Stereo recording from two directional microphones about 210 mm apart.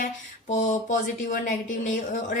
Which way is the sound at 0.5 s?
35° left (ahead or behind).